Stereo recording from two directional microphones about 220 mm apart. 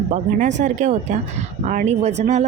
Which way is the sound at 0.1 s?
35° right (ahead or behind).